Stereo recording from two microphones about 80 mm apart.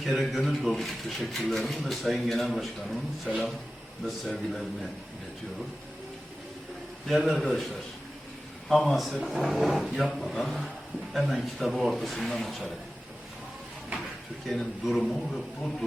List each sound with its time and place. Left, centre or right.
0.0 s speech: centre
3.2 s speech: centre
4.0 s speech: centre
7.1 s speech: centre
8.7 s speech: centre
14.4 s speech: centre